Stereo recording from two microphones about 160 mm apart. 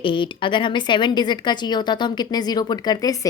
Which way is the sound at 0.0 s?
30° left (ahead or behind).